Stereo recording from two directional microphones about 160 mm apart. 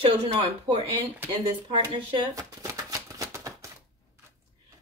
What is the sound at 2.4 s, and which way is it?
Shuffling cards, 20° right (ahead or behind).